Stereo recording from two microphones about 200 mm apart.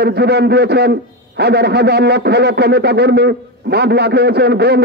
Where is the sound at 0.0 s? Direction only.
55° right (ahead or behind).